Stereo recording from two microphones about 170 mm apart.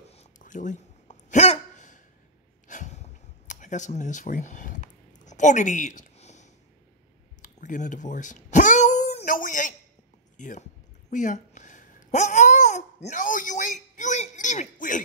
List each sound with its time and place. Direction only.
0.1 s hiccup: 45° left (ahead or behind)
2.7 s a sound: 45° left (ahead or behind)
10.3 s speech: 45° left (ahead or behind)
11.1 s babbling: 45° left (ahead or behind)